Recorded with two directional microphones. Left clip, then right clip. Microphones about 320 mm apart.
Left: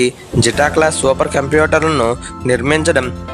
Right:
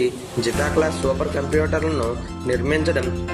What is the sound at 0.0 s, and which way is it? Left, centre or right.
Speech, left.